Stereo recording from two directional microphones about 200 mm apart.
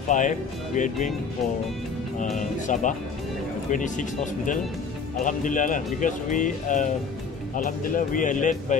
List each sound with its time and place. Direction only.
0.1 s speech: 40° left (ahead or behind)
2.3 s speech: 40° left (ahead or behind)